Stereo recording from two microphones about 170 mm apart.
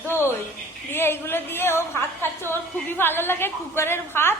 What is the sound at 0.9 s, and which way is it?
A woman's voice, 15° left (ahead or behind).